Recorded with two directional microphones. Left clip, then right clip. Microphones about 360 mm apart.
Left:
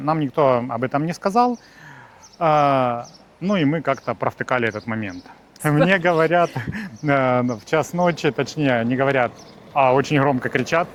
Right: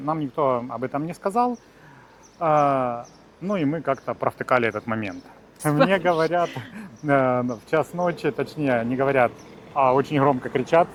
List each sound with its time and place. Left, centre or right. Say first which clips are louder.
0.0 s speech: left 5 dB; left
5.9 s speech: left 4 dB; left